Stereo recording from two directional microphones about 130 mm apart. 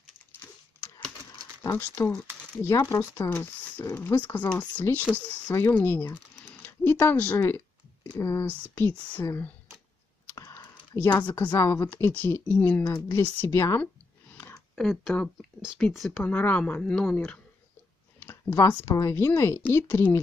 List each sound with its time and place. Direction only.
0.4 s a sound: 15° left (ahead or behind)
1.6 s speech: 20° left (ahead or behind)
11.5 s speech: 25° left (ahead or behind)
14.3 s a sound: 20° left (ahead or behind)
14.8 s speech: 5° left (ahead or behind)
18.2 s speech: 20° left (ahead or behind)